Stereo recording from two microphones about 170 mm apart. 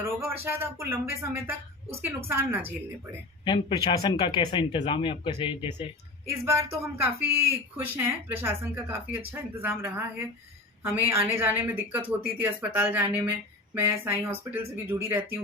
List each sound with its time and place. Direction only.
0.2 s speech: 15° right (ahead or behind)
3.4 s speech: 30° left (ahead or behind)
6.2 s speech: 15° right (ahead or behind)